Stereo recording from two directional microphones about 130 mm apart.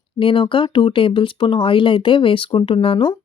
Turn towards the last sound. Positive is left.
turn(degrees=40)  # may be behind; listen again after turning